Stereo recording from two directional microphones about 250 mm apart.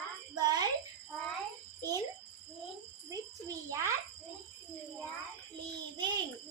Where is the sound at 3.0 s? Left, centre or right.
Centre.